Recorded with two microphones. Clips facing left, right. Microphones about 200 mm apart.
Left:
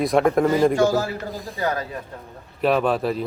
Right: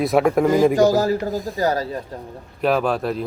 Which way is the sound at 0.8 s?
40° right (ahead or behind).